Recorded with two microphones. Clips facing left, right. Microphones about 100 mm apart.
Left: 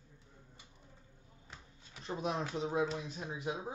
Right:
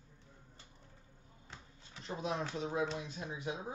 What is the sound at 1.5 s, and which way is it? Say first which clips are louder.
Drawer open or close: right 1 dB; 20° left (ahead or behind).